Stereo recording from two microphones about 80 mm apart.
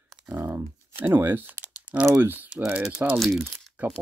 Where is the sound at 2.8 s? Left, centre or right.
Centre.